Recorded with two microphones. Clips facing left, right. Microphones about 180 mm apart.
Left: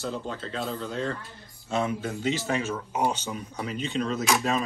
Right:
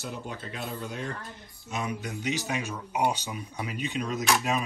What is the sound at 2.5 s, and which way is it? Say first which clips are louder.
Speech: left 3 dB; 15° right (ahead or behind).